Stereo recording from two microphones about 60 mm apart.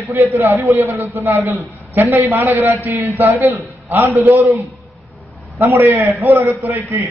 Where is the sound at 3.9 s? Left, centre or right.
Right.